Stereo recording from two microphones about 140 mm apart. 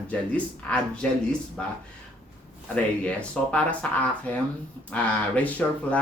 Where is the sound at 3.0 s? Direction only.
10° left (ahead or behind).